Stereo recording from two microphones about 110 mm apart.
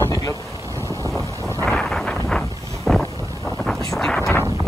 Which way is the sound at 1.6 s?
5° left (ahead or behind).